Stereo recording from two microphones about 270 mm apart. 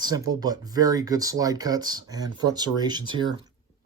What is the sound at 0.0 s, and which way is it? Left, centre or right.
Speech, centre.